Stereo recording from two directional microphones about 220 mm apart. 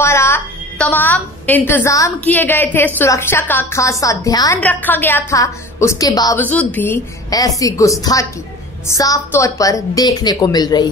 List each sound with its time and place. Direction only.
0.0 s a woman's voice: 10° left (ahead or behind)